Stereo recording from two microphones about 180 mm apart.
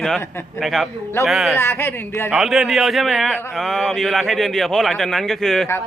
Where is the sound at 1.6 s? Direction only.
15° left (ahead or behind).